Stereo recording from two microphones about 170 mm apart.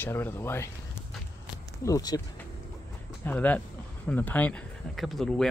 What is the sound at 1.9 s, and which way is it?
Speech, 20° left (ahead or behind).